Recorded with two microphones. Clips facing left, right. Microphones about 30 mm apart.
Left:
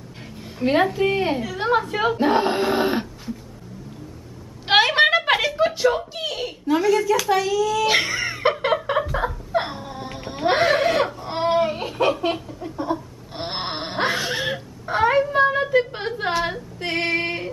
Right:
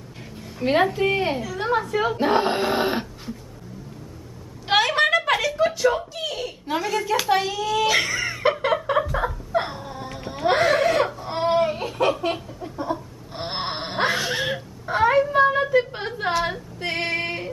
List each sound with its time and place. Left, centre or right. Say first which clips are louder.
0.6 s speech: left 1 dB; centre
1.4 s a woman's voice: left 2 dB; left
2.1 s speech: left 2 dB; centre
4.6 s a sound: left 3 dB; left
5.5 s speech: left 1 dB; centre
6.8 s speech: left 6 dB; centre
7.1 s a child's voice: left 2 dB; right
7.8 s a sound: left 1 dB; centre
9.5 s a sound: left 1 dB; centre